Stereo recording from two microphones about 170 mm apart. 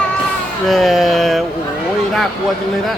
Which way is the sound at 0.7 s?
Centre (ahead or behind).